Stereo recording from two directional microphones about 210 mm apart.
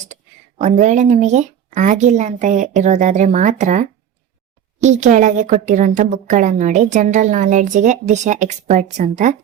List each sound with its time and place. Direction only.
0.6 s a woman's voice: 35° right (ahead or behind)